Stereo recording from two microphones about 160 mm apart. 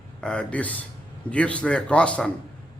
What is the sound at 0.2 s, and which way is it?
Speech, 5° left (ahead or behind).